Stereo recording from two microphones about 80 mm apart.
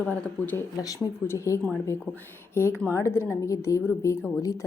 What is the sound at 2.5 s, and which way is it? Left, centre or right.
Speech, left.